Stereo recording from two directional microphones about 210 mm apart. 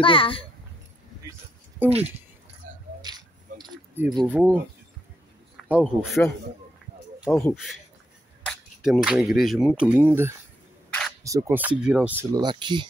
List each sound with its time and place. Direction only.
0.0 s a child's voice: 25° left (ahead or behind)
1.8 s speech: 10° right (ahead or behind)
3.0 s a sound: 20° right (ahead or behind)
4.0 s speech: 20° right (ahead or behind)
4.3 s speech: 5° right (ahead or behind)
5.7 s speech: 5° right (ahead or behind)
7.2 s speech: 10° left (ahead or behind)
8.5 s speech: centre (ahead or behind)
10.9 s camera: 5° left (ahead or behind)
11.2 s speech: 15° right (ahead or behind)
12.4 s speech: 20° right (ahead or behind)